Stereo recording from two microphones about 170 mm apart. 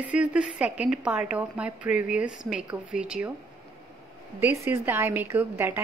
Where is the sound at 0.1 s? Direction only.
5° right (ahead or behind).